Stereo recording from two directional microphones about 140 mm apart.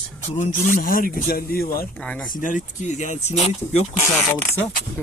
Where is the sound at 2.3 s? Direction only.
70° left (ahead or behind); by 3.8 s 50° left (ahead or behind).